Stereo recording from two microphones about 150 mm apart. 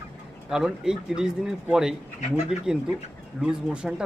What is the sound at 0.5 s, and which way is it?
Speech, 5° right (ahead or behind).